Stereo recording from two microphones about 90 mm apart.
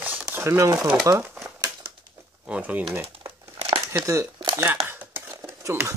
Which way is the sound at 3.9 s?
30° right (ahead or behind).